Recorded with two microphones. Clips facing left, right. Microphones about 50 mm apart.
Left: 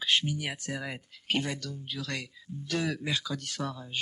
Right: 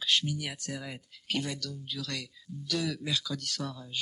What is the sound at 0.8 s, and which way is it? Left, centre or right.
Speech, left.